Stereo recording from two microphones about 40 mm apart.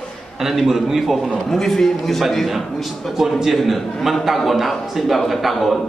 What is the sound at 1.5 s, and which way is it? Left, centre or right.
A man's voice, centre.